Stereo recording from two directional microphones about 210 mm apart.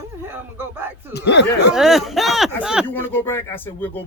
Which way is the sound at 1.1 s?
55° left (ahead or behind).